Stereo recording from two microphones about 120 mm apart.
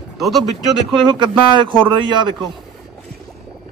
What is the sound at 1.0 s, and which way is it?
A man's voice, 40° right (ahead or behind).